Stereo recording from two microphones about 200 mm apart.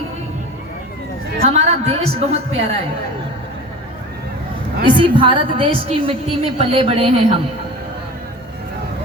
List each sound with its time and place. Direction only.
1.4 s a woman's voice: 30° right (ahead or behind)
4.9 s a woman's voice: 25° right (ahead or behind)